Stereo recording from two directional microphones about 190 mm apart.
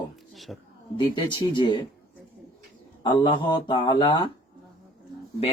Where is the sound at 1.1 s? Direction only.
25° left (ahead or behind).